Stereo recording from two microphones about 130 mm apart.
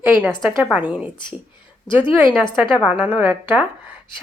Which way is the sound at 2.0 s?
40° left (ahead or behind).